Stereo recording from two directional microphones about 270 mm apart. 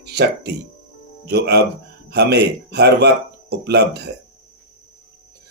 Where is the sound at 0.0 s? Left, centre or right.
Right.